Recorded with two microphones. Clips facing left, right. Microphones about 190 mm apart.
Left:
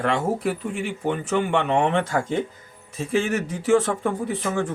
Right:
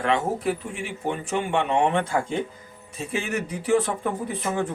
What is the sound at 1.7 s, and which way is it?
Speech, 40° left (ahead or behind).